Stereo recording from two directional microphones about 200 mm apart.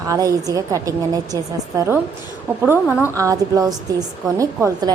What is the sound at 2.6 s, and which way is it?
A woman's voice, 10° right (ahead or behind).